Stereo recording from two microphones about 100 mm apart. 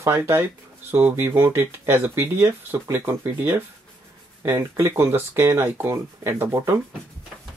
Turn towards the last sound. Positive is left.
turn(degrees=-25)  # may be behind; listen again after turning